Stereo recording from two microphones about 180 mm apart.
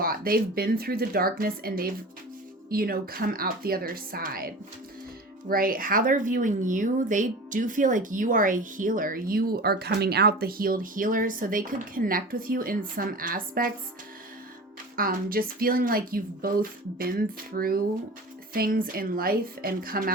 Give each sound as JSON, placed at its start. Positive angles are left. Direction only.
{"t": 0.0, "sound": "speech", "side_deg": -55}
{"t": 14.9, "sound": "speech", "side_deg": -55}